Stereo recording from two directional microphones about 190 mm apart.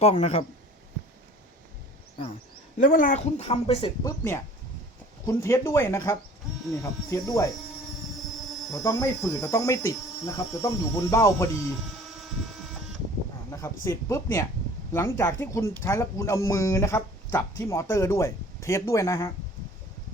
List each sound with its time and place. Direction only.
0.0 s speech: 35° left (ahead or behind)
2.7 s speech: 45° left (ahead or behind); by 3.9 s 30° left (ahead or behind)
4.0 s speech: 15° left (ahead or behind)
8.7 s speech: 20° left (ahead or behind)
13.5 s speech: 15° left (ahead or behind)